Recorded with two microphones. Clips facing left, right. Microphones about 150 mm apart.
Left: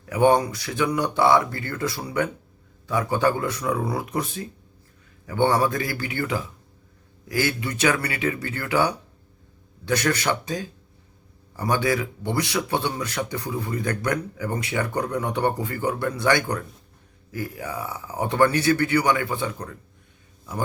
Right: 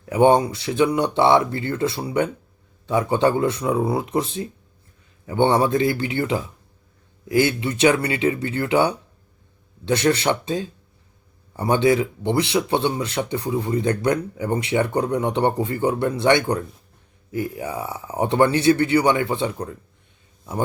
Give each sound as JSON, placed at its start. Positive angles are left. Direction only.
{"t": 0.0, "sound": "speech", "side_deg": -25}